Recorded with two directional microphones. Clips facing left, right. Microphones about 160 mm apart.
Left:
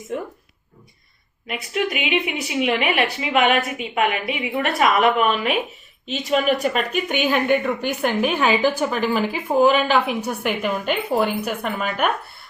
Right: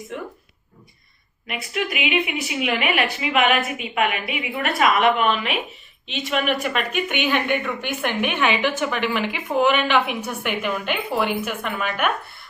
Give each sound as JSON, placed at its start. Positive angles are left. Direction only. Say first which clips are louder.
{"t": 1.5, "sound": "a woman's voice", "louder": "left 3 dB", "side_deg": 35}